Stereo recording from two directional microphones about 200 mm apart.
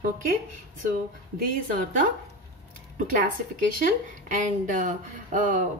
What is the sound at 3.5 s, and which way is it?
Speech, 40° right (ahead or behind).